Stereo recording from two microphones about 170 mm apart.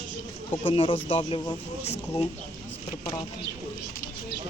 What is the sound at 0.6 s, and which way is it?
Speech, 30° left (ahead or behind).